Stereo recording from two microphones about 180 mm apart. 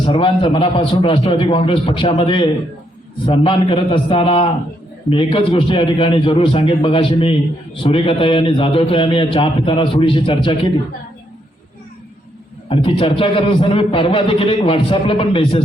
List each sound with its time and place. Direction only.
0.0 s a man's voice: 30° left (ahead or behind)
12.6 s a man's voice: 30° left (ahead or behind)